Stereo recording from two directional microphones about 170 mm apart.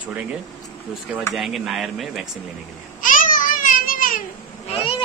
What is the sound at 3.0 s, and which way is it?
Babbling, 50° left (ahead or behind).